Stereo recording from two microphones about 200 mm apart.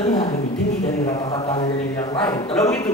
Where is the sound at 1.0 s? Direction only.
20° left (ahead or behind).